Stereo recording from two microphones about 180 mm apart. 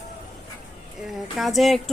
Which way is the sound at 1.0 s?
Centre (ahead or behind).